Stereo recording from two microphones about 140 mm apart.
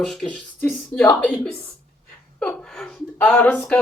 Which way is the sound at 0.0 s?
5° left (ahead or behind).